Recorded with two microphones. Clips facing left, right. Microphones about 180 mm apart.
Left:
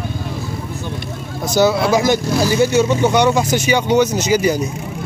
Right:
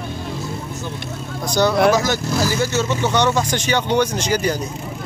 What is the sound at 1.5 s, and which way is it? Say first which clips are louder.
Speech: left 1 dB; 10° left (ahead or behind).